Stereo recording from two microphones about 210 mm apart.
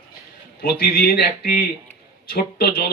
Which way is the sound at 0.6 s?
45° left (ahead or behind).